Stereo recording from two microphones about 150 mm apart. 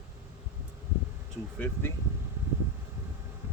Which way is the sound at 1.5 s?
10° left (ahead or behind).